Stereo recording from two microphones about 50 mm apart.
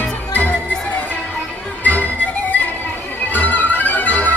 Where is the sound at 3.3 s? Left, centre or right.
Left.